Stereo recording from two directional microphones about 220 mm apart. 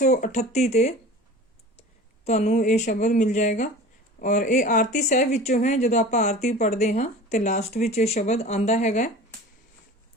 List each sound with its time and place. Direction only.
0.0 s speech: 35° left (ahead or behind)
2.2 s speech: 30° left (ahead or behind)